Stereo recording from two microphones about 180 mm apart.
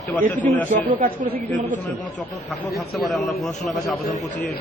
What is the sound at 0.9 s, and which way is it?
Speech, 50° right (ahead or behind).